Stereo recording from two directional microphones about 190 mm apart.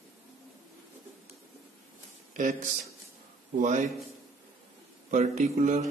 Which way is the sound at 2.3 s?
40° right (ahead or behind).